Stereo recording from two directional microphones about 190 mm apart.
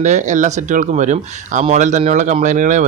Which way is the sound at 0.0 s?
40° right (ahead or behind).